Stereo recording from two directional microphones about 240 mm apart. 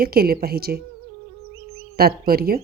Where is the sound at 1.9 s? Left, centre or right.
Right.